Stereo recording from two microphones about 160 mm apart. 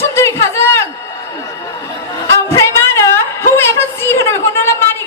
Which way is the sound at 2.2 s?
15° left (ahead or behind).